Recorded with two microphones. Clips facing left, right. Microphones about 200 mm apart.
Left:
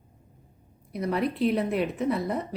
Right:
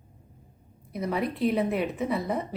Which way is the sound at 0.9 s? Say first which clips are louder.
Left 2 dB; centre (ahead or behind).